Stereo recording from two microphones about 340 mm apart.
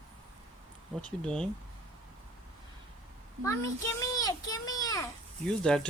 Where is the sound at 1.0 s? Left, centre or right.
Centre.